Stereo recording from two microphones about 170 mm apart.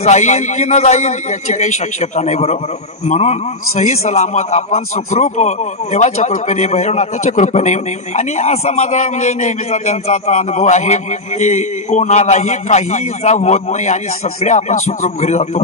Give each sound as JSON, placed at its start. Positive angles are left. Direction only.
{"t": 0.0, "sound": "a man's voice", "side_deg": 40}